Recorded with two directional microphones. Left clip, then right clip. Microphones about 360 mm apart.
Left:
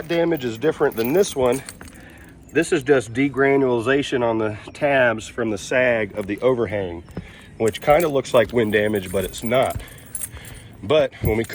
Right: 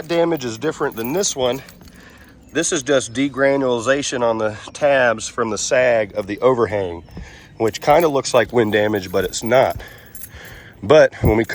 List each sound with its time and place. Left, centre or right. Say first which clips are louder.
0.1 s speech: right 3 dB; centre
8.5 s speech: right 3 dB; right
10.8 s speech: right 7 dB; right